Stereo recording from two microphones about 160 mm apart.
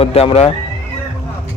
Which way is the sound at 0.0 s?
40° left (ahead or behind).